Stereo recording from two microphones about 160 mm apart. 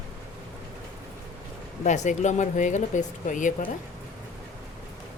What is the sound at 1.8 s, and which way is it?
Speech, 50° left (ahead or behind).